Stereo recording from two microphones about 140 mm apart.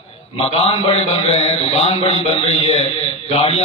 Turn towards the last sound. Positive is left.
turn(degrees=45)  # may be behind; listen again after turning